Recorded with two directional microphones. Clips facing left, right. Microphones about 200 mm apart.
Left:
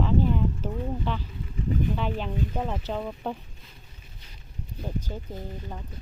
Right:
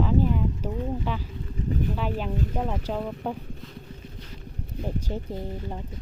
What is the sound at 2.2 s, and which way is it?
Speech, 5° right (ahead or behind).